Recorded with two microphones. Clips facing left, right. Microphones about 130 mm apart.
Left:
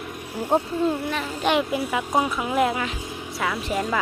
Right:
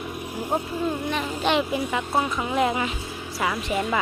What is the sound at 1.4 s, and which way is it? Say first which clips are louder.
Speech: left 1 dB; 5° left (ahead or behind).